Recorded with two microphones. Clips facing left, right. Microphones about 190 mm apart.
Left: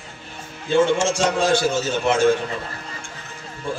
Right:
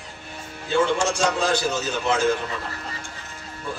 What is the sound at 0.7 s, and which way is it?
A man's voice, 25° left (ahead or behind).